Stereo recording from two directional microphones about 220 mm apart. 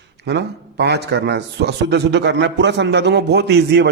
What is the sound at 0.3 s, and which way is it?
A man's voice, 50° right (ahead or behind).